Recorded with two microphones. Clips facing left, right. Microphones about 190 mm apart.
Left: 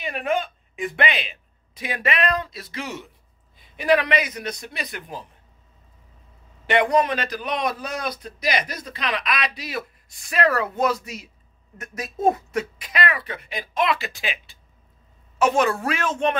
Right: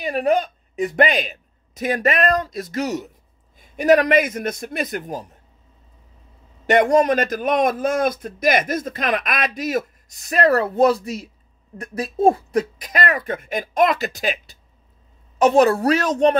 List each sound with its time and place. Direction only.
0.0 s a man's voice: 40° right (ahead or behind)
6.6 s a man's voice: 45° right (ahead or behind)